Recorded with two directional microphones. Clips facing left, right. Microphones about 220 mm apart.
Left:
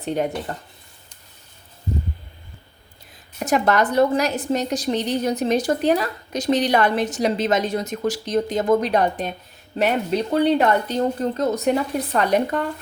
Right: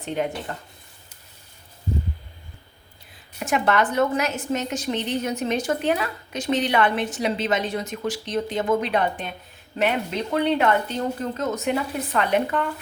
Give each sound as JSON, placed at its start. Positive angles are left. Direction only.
{"t": 0.0, "sound": "speech", "side_deg": 40}
{"t": 3.4, "sound": "a woman's voice", "side_deg": 40}